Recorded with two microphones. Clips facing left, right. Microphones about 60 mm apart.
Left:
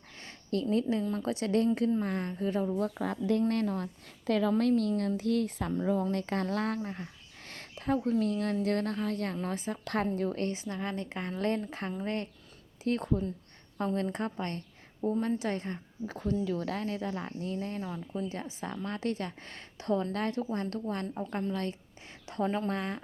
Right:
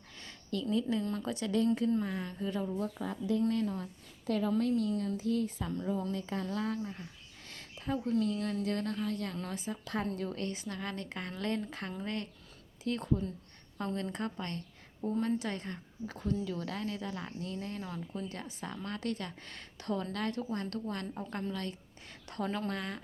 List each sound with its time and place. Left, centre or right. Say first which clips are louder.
0.2 s a sound: left 5 dB; left
1.2 s speech: left 4 dB; left
2.7 s speech: left 5 dB; left
3.5 s speech: left 3 dB; left
4.3 s a woman's voice: left 4 dB; left
4.5 s speech: left 3 dB; left
9.8 s speech: left 5 dB; left
10.2 s a woman's voice: left 5 dB; left
17.8 s a woman's voice: left 4 dB; centre; by 21.8 s left
22.3 s a woman's voice: left 5 dB; centre
22.7 s speech: left 4 dB; left